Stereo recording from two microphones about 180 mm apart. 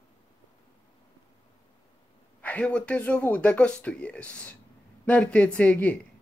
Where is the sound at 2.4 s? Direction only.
10° left (ahead or behind).